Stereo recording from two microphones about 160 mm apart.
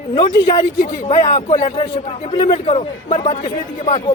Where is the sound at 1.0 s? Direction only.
40° left (ahead or behind).